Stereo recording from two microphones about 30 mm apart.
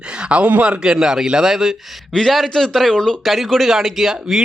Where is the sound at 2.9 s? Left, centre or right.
Left.